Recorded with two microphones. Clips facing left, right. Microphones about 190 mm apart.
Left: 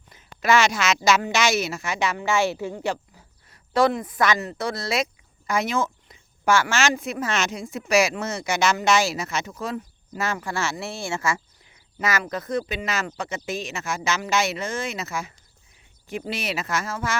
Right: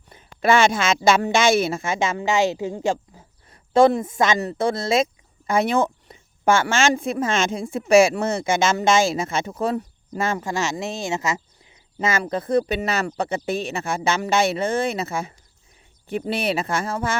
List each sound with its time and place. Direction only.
0.1 s a sound: 30° right (ahead or behind)
1.2 s a woman's voice: 50° right (ahead or behind)
1.6 s a woman's voice: 25° right (ahead or behind)
16.5 s speech: 30° right (ahead or behind)